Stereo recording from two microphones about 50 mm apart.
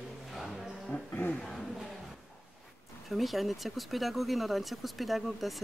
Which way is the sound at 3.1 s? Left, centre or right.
Centre.